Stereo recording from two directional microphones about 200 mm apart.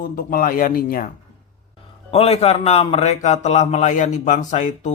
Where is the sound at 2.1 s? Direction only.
30° left (ahead or behind).